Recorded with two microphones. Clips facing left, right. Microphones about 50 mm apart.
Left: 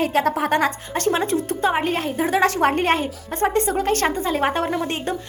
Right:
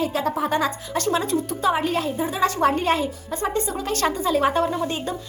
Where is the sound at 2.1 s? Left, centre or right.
Left.